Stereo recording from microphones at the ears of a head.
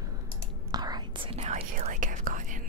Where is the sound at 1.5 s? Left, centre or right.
Right.